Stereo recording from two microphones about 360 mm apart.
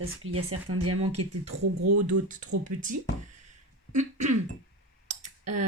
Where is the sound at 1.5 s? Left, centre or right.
Centre.